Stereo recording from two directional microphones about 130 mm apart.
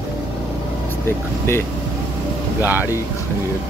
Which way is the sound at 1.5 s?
20° left (ahead or behind).